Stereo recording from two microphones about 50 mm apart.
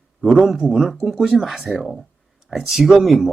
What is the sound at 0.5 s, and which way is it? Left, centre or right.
Speech, centre.